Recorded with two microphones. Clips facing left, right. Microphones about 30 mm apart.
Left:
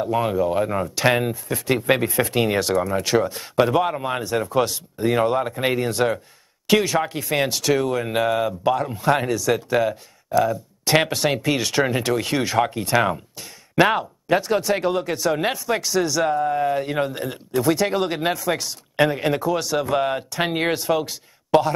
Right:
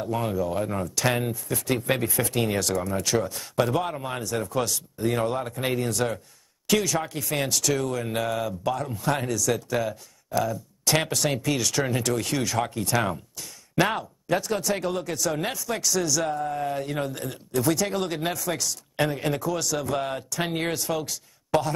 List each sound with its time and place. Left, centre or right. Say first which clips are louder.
0.3 s speech: left 6 dB; left